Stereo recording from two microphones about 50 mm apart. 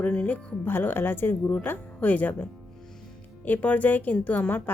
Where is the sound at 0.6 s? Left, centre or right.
Left.